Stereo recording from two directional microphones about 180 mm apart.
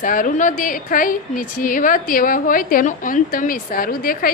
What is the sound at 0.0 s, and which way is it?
A woman's voice, 50° left (ahead or behind).